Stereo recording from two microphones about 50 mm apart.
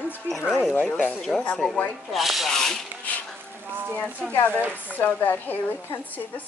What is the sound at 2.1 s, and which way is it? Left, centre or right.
Speech, centre.